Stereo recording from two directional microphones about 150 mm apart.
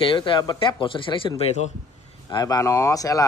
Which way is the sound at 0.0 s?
35° left (ahead or behind).